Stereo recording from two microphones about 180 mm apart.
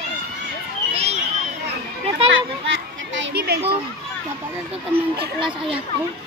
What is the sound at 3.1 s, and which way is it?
Children playing, 75° right (ahead or behind).